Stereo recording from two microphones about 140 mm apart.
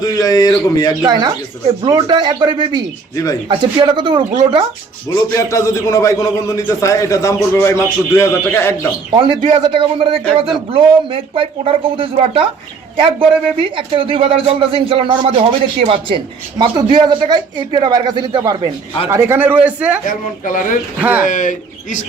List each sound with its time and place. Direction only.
0.0 s a man's voice: 25° left (ahead or behind)
1.0 s a man's voice: 30° right (ahead or behind)
5.0 s a man's voice: 20° left (ahead or behind)
9.1 s a man's voice: 35° right (ahead or behind)
16.6 s a man's voice: 30° right (ahead or behind)
19.1 s a man's voice: 15° right (ahead or behind)
20.1 s speech: 70° left (ahead or behind)
21.0 s a man's voice: 15° right (ahead or behind)
21.2 s speech: 65° left (ahead or behind)